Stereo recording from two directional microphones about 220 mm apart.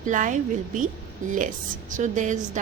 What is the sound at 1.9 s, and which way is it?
Speech, 35° right (ahead or behind).